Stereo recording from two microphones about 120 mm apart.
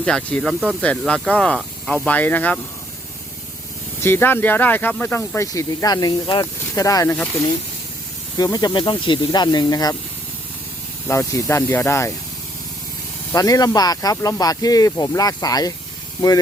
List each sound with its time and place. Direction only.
0.0 s speech: 10° left (ahead or behind)
4.0 s speech: 20° left (ahead or behind)
8.4 s speech: 30° left (ahead or behind)
11.1 s speech: 25° left (ahead or behind)
13.3 s speech: 30° left (ahead or behind)